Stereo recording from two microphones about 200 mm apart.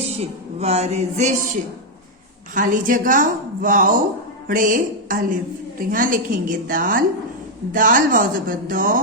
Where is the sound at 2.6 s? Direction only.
40° right (ahead or behind).